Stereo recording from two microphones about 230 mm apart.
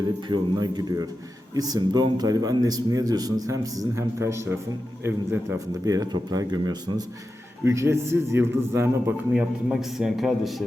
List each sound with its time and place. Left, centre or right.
0.3 s a man's voice: centre